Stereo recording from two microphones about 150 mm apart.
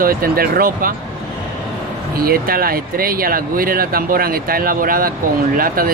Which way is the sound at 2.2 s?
75° right (ahead or behind).